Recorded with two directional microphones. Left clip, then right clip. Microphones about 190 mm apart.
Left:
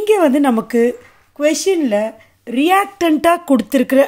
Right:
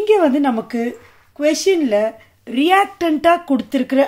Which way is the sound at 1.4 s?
20° left (ahead or behind).